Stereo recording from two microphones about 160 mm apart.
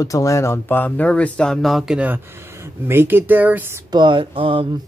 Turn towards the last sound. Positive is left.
turn(degrees=-35)  # may be behind; listen again after turning